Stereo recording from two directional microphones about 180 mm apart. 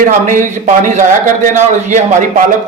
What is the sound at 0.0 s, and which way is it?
Speech, 45° right (ahead or behind).